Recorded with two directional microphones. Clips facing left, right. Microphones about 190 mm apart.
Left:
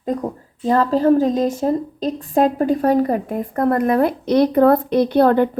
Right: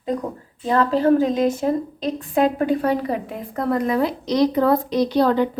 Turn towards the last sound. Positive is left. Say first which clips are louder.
# left 4 dB
turn(degrees=55)  # may be behind; listen again after turning